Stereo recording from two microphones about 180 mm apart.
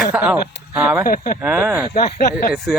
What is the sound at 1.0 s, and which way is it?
Speech, 50° left (ahead or behind).